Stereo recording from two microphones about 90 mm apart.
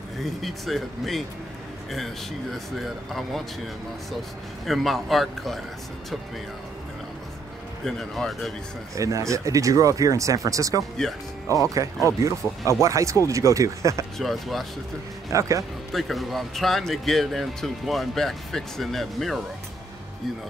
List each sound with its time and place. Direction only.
0.2 s speech: centre (ahead or behind)
2.5 s speech: centre (ahead or behind)
7.8 s speech: 5° left (ahead or behind)
8.9 s speech: 35° right (ahead or behind)
10.8 s speech: 5° left (ahead or behind)
11.7 s speech: 35° right (ahead or behind)
14.1 s speech: centre (ahead or behind)
15.3 s speech: 35° right (ahead or behind)
15.9 s speech: centre (ahead or behind)